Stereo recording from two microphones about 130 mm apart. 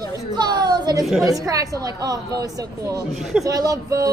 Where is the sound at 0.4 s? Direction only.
30° right (ahead or behind).